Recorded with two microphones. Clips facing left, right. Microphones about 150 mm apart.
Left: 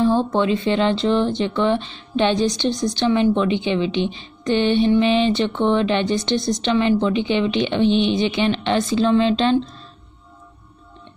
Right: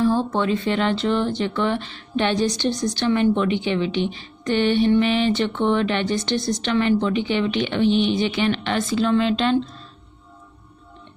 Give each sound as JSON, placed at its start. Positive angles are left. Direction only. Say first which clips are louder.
{"t": 0.0, "sound": "a woman's voice", "louder": "left 2 dB", "side_deg": 20}